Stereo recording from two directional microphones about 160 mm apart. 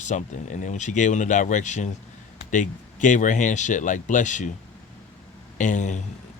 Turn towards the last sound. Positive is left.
turn(degrees=50)  # may be behind; listen again after turning